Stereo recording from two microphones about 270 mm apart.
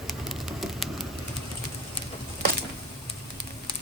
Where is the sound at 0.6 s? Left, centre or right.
Centre.